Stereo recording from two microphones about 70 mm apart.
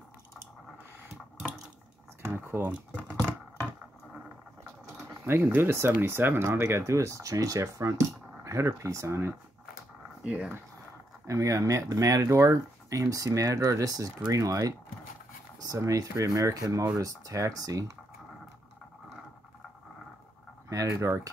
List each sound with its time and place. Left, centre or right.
2.2 s speech: right
5.2 s speech: right
10.2 s speech: centre
11.2 s speech: right
20.7 s speech: right